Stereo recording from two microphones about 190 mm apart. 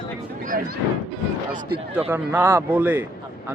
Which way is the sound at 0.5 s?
50° right (ahead or behind).